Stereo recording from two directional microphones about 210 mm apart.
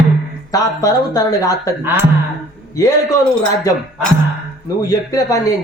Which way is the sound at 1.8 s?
10° right (ahead or behind).